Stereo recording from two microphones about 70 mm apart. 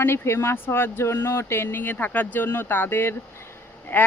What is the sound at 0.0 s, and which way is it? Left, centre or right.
Speech, left.